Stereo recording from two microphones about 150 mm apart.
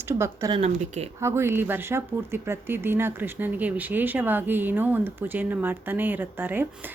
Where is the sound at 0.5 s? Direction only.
45° right (ahead or behind).